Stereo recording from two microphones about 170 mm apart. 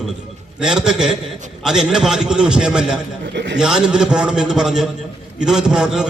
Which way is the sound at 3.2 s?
90° right.